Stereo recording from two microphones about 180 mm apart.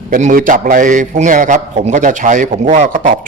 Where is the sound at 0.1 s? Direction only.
45° right (ahead or behind).